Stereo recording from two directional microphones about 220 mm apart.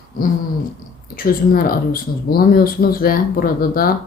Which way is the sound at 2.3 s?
40° left (ahead or behind).